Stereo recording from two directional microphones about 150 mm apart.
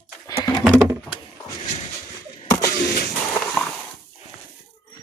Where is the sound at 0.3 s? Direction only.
25° left (ahead or behind).